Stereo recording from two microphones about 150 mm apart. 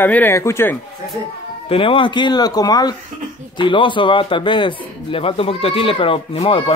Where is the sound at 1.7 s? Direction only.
35° left (ahead or behind).